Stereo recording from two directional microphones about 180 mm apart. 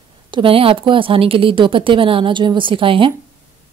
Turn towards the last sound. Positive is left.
turn(degrees=-30)  # may be behind; listen again after turning